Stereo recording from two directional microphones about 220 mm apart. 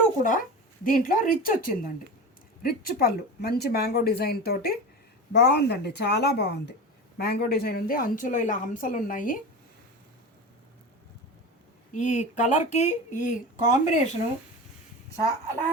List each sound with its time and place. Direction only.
0.2 s a woman's voice: 35° left (ahead or behind)
11.9 s a woman's voice: 35° left (ahead or behind)